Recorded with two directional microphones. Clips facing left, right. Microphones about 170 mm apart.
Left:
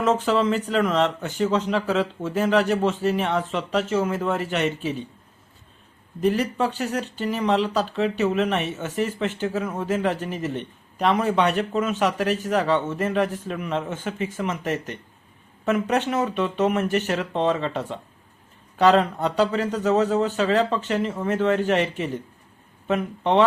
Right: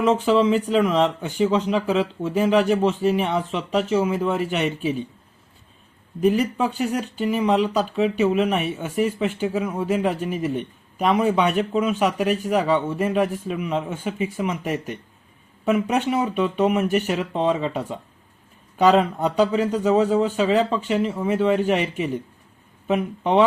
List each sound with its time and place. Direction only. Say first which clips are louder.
0.3 s speech: right 4 dB; 10° right (ahead or behind)
6.1 s speech: right 2 dB; 10° right (ahead or behind)